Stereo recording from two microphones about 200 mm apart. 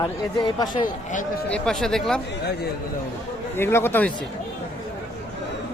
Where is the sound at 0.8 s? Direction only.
40° left (ahead or behind).